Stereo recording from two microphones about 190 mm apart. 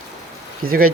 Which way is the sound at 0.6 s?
50° right (ahead or behind).